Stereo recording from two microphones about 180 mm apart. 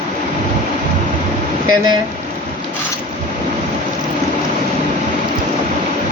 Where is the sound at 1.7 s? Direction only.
25° right (ahead or behind).